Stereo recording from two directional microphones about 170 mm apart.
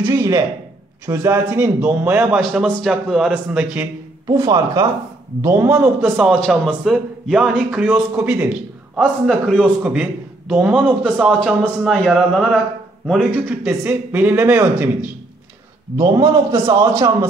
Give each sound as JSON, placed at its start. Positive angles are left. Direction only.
{"t": 0.0, "sound": "a man's voice", "side_deg": -20}
{"t": 4.3, "sound": "a man's voice", "side_deg": -25}
{"t": 16.0, "sound": "a man's voice", "side_deg": -25}
{"t": 16.8, "sound": "a man's voice", "side_deg": -15}